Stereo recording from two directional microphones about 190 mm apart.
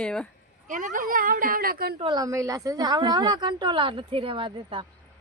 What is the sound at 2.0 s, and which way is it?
A woman's voice, 25° right (ahead or behind).